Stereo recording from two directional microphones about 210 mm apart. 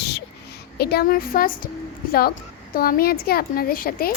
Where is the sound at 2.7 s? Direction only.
45° left (ahead or behind).